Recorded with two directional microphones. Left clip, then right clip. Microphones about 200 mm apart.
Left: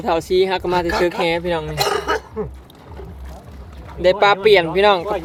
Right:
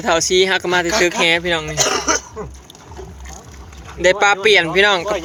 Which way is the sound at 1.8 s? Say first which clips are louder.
Right 1 dB; 40° right (ahead or behind).